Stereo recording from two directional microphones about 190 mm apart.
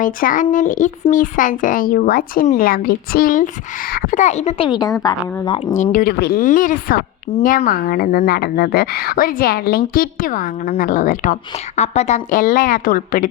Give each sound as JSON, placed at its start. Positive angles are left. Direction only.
{"t": 0.0, "sound": "speech", "side_deg": 45}
{"t": 5.7, "sound": "speech", "side_deg": 45}